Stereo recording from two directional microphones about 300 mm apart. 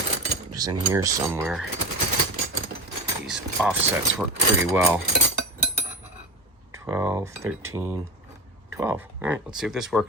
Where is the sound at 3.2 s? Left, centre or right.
Centre.